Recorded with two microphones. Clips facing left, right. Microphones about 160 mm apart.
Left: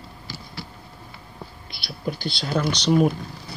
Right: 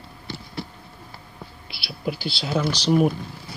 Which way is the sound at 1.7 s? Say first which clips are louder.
Right 1 dB; 5° right (ahead or behind).